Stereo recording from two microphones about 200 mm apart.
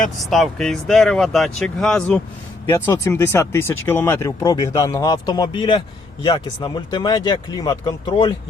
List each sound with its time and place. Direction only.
0.2 s speech: centre (ahead or behind); by 8.4 s 20° left (ahead or behind)